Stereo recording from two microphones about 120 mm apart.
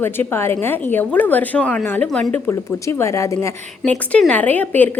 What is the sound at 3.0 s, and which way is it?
Speech, 25° left (ahead or behind).